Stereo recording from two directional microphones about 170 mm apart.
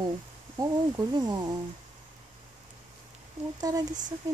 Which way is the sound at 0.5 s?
20° right (ahead or behind).